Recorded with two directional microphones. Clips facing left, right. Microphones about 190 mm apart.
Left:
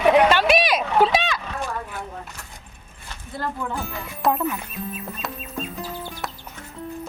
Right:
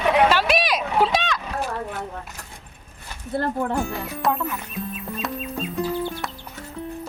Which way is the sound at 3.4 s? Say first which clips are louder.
Right 5 dB; 55° right (ahead or behind).